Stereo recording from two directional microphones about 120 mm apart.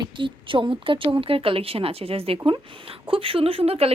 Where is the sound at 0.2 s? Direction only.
45° right (ahead or behind).